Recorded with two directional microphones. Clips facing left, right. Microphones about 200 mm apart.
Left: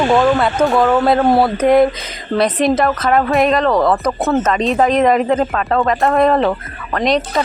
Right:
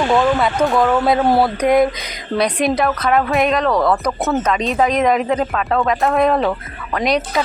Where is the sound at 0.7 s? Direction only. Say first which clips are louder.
Left 3 dB; centre (ahead or behind).